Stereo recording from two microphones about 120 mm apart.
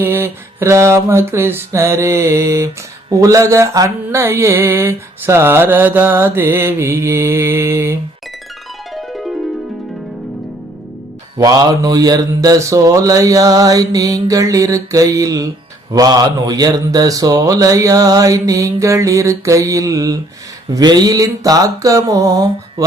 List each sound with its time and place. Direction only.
0.0 s mantra: 20° right (ahead or behind)
9.0 s music: centre (ahead or behind)
11.3 s mantra: 30° right (ahead or behind)